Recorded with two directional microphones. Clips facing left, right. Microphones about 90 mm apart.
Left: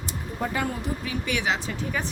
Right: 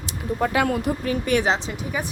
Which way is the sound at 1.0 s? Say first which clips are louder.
Right 6 dB; 45° right (ahead or behind).